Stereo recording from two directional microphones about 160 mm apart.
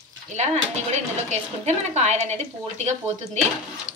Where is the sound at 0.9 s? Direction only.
45° right (ahead or behind).